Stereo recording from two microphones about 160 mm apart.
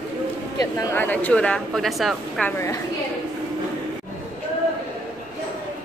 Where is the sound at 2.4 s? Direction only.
15° left (ahead or behind).